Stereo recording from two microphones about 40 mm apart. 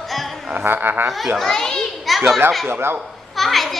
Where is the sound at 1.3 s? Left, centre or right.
Centre.